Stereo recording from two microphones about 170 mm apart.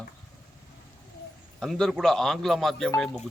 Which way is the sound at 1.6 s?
Centre (ahead or behind).